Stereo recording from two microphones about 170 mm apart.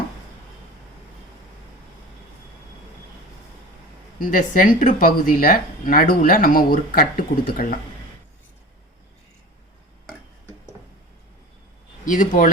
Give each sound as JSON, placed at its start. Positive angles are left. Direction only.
{"t": 4.2, "sound": "speech", "side_deg": 50}
{"t": 12.0, "sound": "speech", "side_deg": 50}